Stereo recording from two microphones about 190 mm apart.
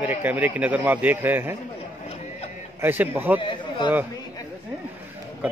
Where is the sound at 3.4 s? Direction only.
25° left (ahead or behind).